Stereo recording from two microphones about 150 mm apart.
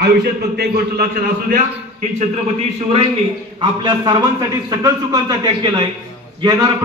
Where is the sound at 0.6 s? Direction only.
90° right; by 1.6 s 70° right (ahead or behind).